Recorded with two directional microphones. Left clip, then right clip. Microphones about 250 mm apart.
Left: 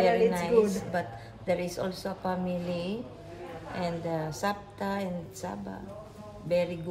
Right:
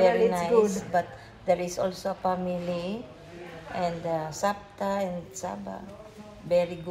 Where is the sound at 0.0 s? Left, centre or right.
Centre.